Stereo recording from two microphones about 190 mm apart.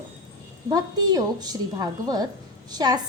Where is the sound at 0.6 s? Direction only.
20° right (ahead or behind).